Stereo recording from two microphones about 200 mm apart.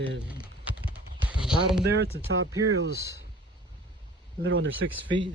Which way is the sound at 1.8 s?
60° right (ahead or behind).